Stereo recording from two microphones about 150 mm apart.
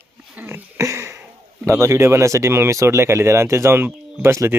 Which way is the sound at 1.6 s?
20° right (ahead or behind).